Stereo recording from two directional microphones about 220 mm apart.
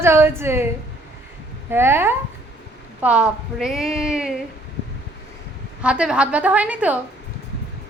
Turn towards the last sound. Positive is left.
turn(degrees=-5)  # may be behind; listen again after turning